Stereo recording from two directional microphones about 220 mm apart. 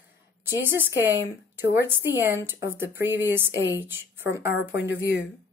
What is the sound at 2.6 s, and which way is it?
Speech, 60° left (ahead or behind).